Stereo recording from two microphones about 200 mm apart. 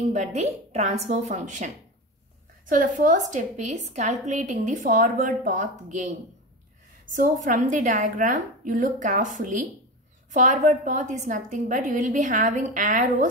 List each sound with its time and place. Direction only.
0.1 s a woman's voice: 35° right (ahead or behind)